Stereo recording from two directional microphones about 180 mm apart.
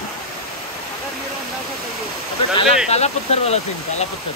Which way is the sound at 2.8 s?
35° left (ahead or behind).